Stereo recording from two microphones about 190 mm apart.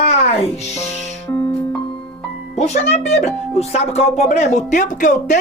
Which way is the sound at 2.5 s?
35° left (ahead or behind).